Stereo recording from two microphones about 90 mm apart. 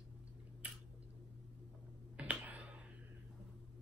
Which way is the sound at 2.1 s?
15° right (ahead or behind).